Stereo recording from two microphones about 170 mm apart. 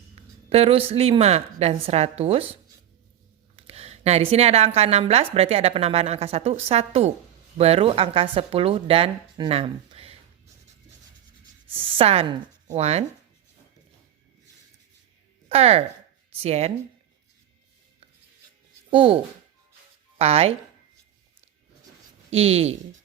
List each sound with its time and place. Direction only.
0.2 s a woman's voice: 35° right (ahead or behind)
11.7 s a woman's voice: 30° right (ahead or behind)
15.4 s a woman's voice: 35° right (ahead or behind)
18.9 s speech: 30° right (ahead or behind)
22.3 s a woman's voice: 35° right (ahead or behind)